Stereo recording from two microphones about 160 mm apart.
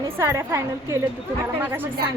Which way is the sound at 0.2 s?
15° right (ahead or behind).